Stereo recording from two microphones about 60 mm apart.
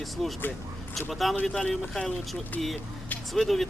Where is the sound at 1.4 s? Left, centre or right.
Centre.